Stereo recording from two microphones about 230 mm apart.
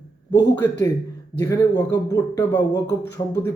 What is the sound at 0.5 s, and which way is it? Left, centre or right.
Speech, centre.